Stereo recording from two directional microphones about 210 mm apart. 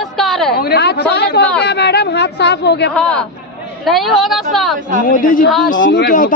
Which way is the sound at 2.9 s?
5° left (ahead or behind).